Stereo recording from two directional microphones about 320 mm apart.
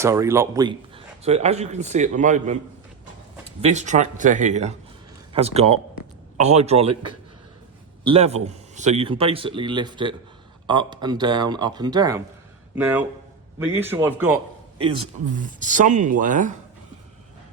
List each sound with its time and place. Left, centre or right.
0.0 s speech: centre
3.6 s speech: right; by 14.4 s centre
14.8 s speech: centre